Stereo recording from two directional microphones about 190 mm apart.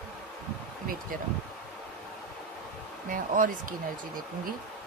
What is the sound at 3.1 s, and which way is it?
Speech, 45° right (ahead or behind).